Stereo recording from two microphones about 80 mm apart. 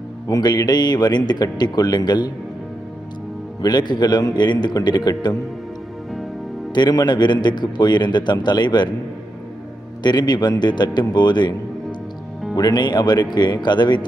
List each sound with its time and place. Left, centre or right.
0.3 s a man's voice: left
3.6 s a man's voice: left
4.7 s a man's voice: left
6.7 s a man's voice: left
10.0 s a man's voice: left
12.5 s a man's voice: left